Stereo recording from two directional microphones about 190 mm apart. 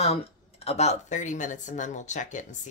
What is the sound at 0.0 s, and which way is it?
Speech, 30° left (ahead or behind).